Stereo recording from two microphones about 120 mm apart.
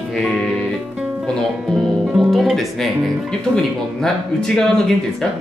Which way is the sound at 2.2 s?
Centre (ahead or behind).